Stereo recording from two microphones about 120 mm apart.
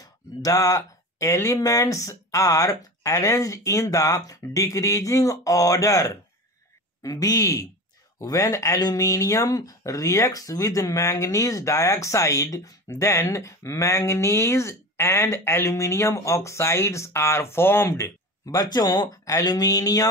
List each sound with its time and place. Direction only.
0.0 s speech: 30° left (ahead or behind)